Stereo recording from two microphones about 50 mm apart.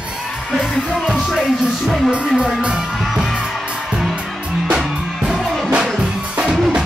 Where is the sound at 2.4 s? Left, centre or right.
Centre.